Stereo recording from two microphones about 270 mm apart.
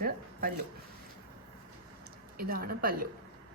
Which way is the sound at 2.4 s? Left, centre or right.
Right.